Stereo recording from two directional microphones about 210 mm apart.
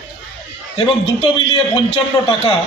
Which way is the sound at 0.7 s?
25° left (ahead or behind).